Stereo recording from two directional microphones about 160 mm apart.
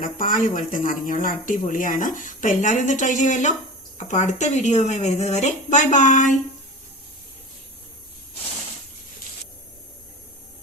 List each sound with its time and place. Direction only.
0.0 s speech: 60° left (ahead or behind)